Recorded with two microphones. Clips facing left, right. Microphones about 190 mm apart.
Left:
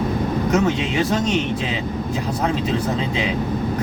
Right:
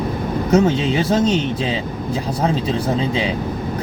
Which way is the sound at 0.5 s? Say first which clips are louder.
Right 6 dB; 30° right (ahead or behind).